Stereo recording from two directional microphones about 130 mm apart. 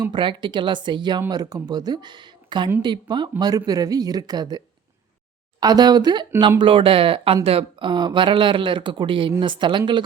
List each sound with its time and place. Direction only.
0.0 s speech: 40° right (ahead or behind)